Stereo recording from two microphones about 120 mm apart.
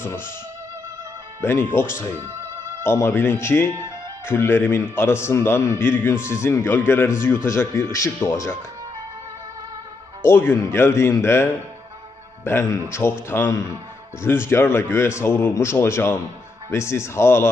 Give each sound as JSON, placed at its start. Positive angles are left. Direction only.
{"t": 0.0, "sound": "speech", "side_deg": 20}
{"t": 1.4, "sound": "speech", "side_deg": 20}
{"t": 10.2, "sound": "speech", "side_deg": 20}
{"t": 12.5, "sound": "speech", "side_deg": 25}